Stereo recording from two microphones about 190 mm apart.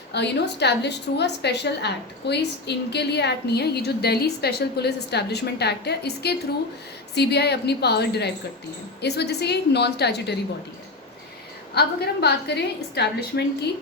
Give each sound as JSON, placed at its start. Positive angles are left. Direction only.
{"t": 0.1, "sound": "a woman's voice", "side_deg": 65}
{"t": 11.7, "sound": "a woman's voice", "side_deg": 60}